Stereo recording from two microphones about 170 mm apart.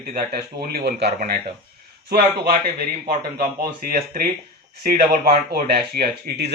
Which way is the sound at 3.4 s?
60° right (ahead or behind).